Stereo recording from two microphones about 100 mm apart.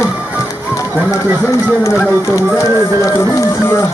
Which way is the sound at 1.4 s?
25° left (ahead or behind).